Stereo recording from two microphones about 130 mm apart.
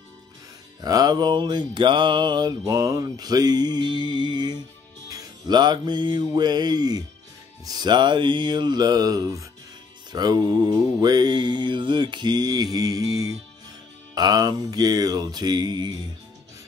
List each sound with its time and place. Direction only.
0.7 s music: 30° right (ahead or behind)
14.1 s music: 30° right (ahead or behind)